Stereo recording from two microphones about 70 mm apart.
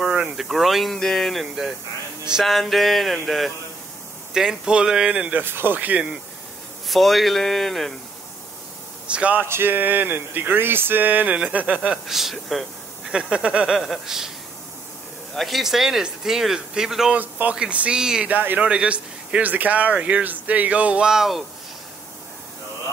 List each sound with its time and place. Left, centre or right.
0.0 s snake: centre
0.5 s speech: centre
5.4 s speech: right
6.9 s speech: centre
9.0 s speech: centre
9.4 s speech: right
11.9 s speech: centre
13.1 s speech: centre
13.7 s speech: centre
15.3 s speech: centre
17.1 s speech: right
18.3 s speech: right; by 21.5 s centre